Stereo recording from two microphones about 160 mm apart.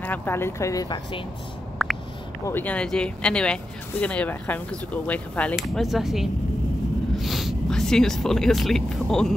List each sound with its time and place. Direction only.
0.0 s speech: 10° left (ahead or behind); by 1.2 s 30° left (ahead or behind)
1.8 s a sound: centre (ahead or behind)
2.4 s speech: 10° left (ahead or behind)